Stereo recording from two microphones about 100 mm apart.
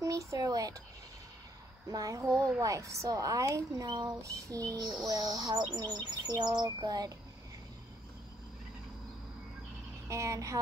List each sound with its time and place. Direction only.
0.0 s a sound: 35° right (ahead or behind)
1.9 s speech: 35° right (ahead or behind)
5.8 s bird: 40° right (ahead or behind)
10.0 s speech: 30° right (ahead or behind)